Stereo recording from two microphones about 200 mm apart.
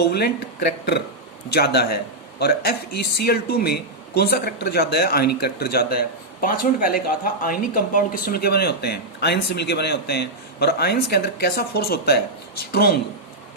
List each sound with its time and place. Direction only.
0.0 s speech: 55° left (ahead or behind)